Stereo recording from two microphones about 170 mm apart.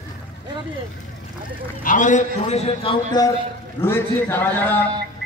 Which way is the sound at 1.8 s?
50° left (ahead or behind).